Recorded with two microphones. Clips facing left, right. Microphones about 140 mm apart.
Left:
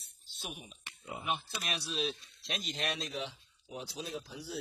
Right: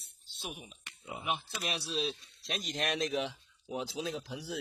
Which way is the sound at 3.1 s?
90° right.